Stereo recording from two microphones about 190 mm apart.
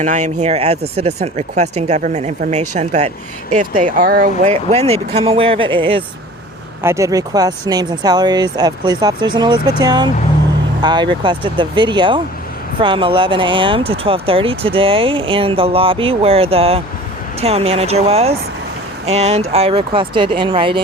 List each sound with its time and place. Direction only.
0.0 s speech: 40° right (ahead or behind)
4.5 s speech: 35° right (ahead or behind)
6.8 s speech: 15° right (ahead or behind)